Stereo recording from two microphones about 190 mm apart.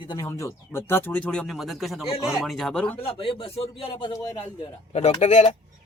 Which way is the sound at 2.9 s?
30° left (ahead or behind).